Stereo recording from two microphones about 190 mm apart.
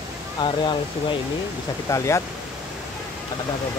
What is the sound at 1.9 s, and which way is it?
Speech, 15° left (ahead or behind).